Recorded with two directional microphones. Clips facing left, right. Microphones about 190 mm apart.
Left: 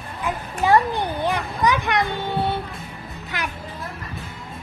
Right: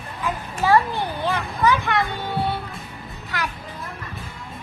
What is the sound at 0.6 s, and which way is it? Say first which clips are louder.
Children playing: left 1 dB; 15° left (ahead or behind).